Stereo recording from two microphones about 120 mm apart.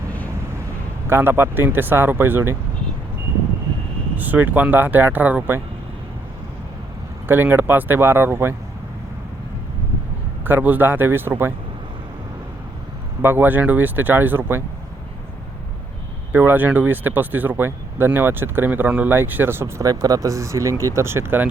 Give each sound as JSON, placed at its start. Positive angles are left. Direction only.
{"t": 1.0, "sound": "speech", "side_deg": -20}
{"t": 4.2, "sound": "speech", "side_deg": -15}
{"t": 7.3, "sound": "speech", "side_deg": -15}
{"t": 10.4, "sound": "speech", "side_deg": -15}
{"t": 13.2, "sound": "speech", "side_deg": -15}
{"t": 16.3, "sound": "speech", "side_deg": -15}